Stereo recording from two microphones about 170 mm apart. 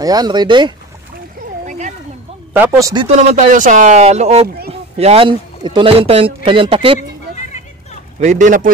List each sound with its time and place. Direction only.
0.0 s speech: 25° right (ahead or behind)
1.7 s a sound: 45° right (ahead or behind)
2.5 s speech: 15° right (ahead or behind)
3.1 s a man's voice: 40° right (ahead or behind)
7.0 s a sound: 45° left (ahead or behind)
8.2 s speech: 45° right (ahead or behind)